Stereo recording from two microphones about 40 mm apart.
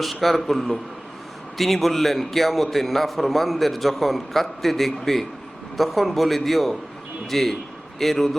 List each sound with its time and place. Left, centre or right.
0.0 s a man's voice: centre